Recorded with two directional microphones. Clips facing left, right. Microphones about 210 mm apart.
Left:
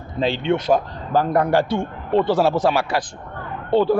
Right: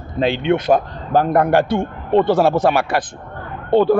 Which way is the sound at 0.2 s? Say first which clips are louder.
Right 3 dB; 60° right (ahead or behind).